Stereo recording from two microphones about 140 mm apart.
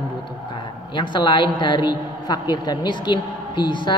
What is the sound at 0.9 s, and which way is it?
A woman's voice, 35° left (ahead or behind).